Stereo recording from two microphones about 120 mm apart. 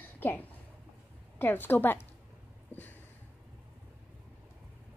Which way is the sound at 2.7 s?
20° left (ahead or behind).